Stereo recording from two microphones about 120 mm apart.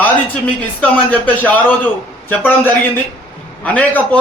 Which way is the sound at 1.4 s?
15° left (ahead or behind).